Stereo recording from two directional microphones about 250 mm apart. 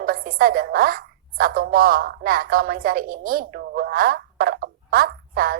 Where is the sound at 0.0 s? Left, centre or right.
Right.